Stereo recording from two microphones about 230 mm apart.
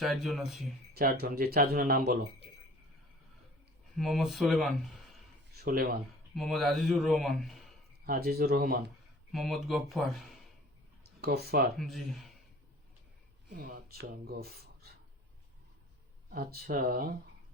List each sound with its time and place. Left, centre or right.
0.0 s a man's voice: centre
0.9 s speech: right
3.9 s speech: centre
5.5 s speech: right
6.3 s a man's voice: centre
8.0 s speech: right
9.3 s speech: centre
11.2 s speech: right
11.8 s a man's voice: centre
13.5 s speech: right
16.3 s speech: right